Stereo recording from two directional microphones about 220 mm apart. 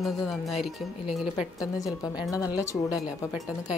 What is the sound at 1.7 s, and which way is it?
Speech, 15° left (ahead or behind).